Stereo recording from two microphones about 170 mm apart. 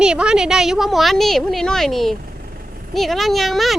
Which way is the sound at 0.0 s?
5° right (ahead or behind).